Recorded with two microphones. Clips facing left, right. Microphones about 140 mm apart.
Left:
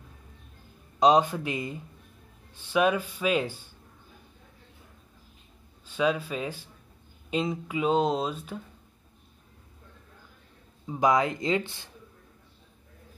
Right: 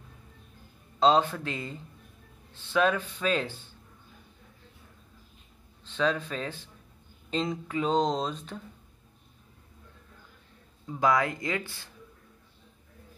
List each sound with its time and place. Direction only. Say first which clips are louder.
0.9 s speech: left 2 dB; 15° left (ahead or behind)
5.9 s speech: left 2 dB; 10° left (ahead or behind)
10.9 s speech: left 2 dB; 20° left (ahead or behind)